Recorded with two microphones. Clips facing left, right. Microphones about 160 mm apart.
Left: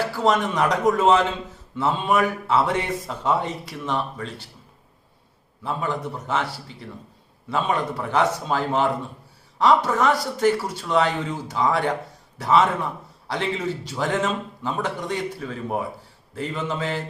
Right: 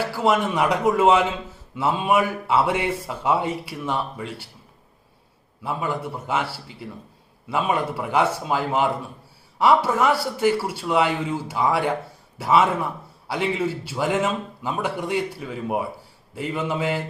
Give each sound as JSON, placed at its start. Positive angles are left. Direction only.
{"t": 0.2, "sound": "a man's voice", "side_deg": -10}
{"t": 5.6, "sound": "a man's voice", "side_deg": -10}